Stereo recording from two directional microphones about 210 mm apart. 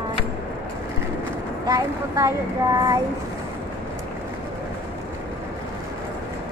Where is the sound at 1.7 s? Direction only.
15° right (ahead or behind).